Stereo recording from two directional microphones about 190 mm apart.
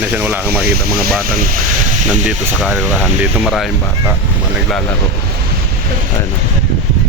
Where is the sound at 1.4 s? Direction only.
50° right (ahead or behind).